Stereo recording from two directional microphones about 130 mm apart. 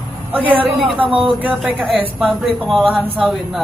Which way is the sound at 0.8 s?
40° right (ahead or behind).